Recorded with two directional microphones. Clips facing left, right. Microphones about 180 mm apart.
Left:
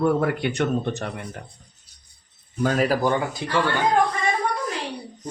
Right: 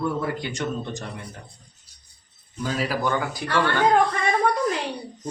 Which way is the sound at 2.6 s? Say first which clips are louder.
Left 6 dB; 50° left (ahead or behind).